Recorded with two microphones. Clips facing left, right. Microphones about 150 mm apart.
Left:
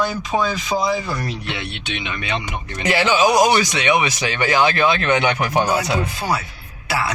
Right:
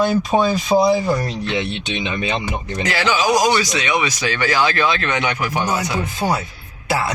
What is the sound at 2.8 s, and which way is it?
Speech, 20° left (ahead or behind).